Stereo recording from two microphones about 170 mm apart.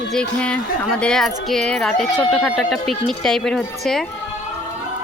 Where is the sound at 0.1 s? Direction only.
5° left (ahead or behind).